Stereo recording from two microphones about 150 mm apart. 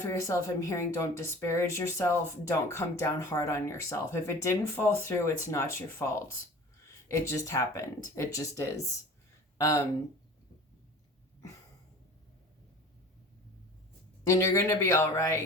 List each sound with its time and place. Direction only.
0.0 s speech: 20° left (ahead or behind)
7.3 s speech: 20° left (ahead or behind)
14.3 s speech: 20° left (ahead or behind)